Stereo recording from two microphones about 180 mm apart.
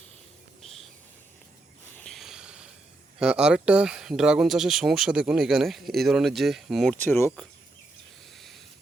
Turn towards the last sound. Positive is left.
turn(degrees=10)  # may be behind; listen again after turning